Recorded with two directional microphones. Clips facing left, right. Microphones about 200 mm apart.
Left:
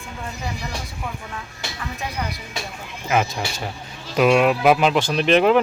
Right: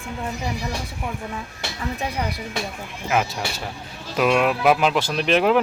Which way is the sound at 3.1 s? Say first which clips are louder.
Left 1 dB; centre (ahead or behind).